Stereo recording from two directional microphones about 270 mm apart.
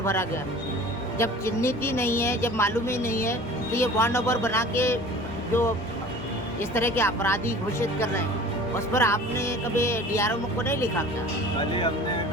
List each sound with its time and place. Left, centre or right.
0.0 s a woman's voice: centre
6.6 s a woman's voice: centre